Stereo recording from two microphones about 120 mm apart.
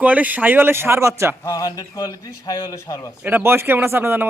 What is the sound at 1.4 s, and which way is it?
A man's voice, 30° left (ahead or behind).